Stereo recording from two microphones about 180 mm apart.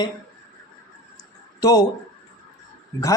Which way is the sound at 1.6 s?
20° left (ahead or behind).